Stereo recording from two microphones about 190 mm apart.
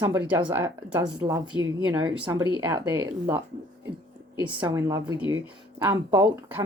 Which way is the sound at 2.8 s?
10° right (ahead or behind).